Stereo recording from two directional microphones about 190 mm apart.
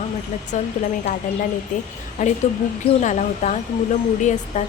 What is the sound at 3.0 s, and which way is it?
A woman's voice, 40° left (ahead or behind).